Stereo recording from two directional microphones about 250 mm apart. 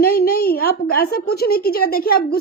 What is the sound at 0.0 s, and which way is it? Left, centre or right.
A woman's voice, left.